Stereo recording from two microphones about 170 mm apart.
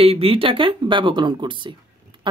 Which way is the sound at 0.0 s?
35° right (ahead or behind).